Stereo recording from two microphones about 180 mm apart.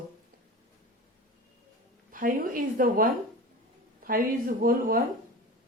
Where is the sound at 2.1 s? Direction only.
50° right (ahead or behind).